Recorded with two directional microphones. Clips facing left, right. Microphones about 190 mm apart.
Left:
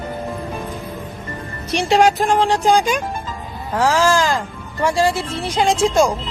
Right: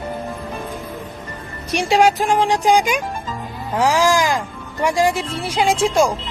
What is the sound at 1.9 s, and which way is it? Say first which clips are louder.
Speech: left 1 dB; 10° right (ahead or behind).